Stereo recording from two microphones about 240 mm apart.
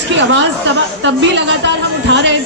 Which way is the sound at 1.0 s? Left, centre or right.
Right.